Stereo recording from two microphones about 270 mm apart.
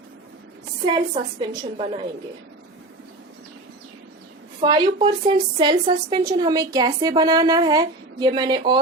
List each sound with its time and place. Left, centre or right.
0.9 s a woman's voice: centre
4.6 s a woman's voice: centre